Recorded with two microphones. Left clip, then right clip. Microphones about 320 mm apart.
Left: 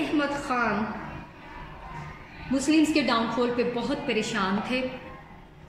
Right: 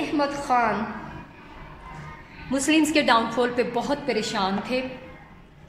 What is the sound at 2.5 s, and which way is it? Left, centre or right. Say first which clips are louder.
A woman's voice: right 2 dB; right.